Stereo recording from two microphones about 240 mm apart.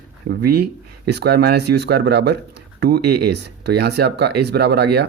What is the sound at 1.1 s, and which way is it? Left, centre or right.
Speech, right.